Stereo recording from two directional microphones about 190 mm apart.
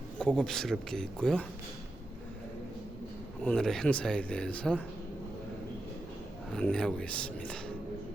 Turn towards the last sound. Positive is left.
turn(degrees=5)  # may be behind; listen again after turning